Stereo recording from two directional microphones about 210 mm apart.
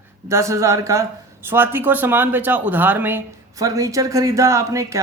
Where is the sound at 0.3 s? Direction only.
15° right (ahead or behind).